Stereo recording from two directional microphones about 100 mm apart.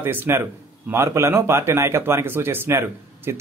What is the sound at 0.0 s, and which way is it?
Speech, 20° right (ahead or behind).